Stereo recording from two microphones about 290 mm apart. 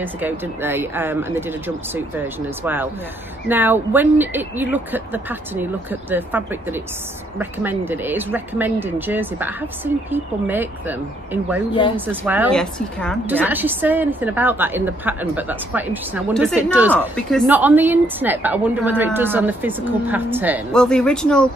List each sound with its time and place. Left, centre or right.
0.0 s a woman's voice: centre
11.7 s speech: centre
12.1 s a woman's voice: centre